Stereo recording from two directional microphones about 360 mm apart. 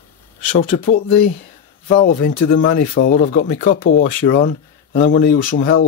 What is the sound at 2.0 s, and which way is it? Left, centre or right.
Speech, left.